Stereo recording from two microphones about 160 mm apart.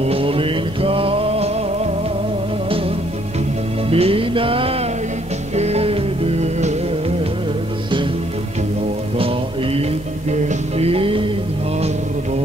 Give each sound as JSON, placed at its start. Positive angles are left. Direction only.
{"t": 0.0, "sound": "music", "side_deg": -35}
{"t": 3.9, "sound": "music", "side_deg": -35}
{"t": 10.3, "sound": "music", "side_deg": -40}